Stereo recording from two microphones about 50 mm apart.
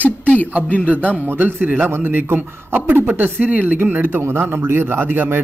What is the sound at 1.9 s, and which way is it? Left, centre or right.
A man's voice, right.